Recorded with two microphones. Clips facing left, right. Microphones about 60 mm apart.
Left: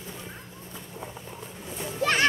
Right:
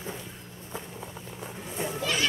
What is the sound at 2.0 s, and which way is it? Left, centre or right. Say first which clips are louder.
Music: left 7 dB; left.